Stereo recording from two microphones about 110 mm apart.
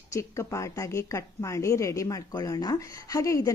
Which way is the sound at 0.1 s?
30° left (ahead or behind).